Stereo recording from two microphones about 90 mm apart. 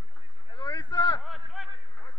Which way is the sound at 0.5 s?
60° left (ahead or behind).